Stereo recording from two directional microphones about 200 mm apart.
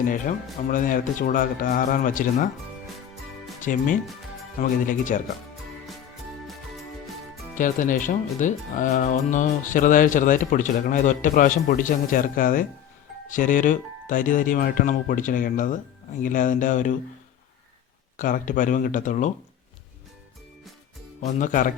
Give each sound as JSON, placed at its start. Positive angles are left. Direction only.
{"t": 0.7, "sound": "speech", "side_deg": 40}
{"t": 3.6, "sound": "speech", "side_deg": 40}
{"t": 7.5, "sound": "speech", "side_deg": 40}
{"t": 18.2, "sound": "speech", "side_deg": 40}
{"t": 21.2, "sound": "speech", "side_deg": 40}